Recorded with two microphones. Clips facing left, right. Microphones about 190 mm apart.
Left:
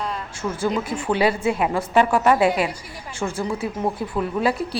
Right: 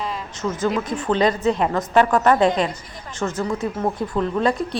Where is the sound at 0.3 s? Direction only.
10° left (ahead or behind).